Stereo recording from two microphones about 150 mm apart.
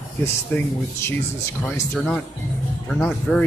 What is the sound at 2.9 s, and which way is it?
Speech, 5° left (ahead or behind).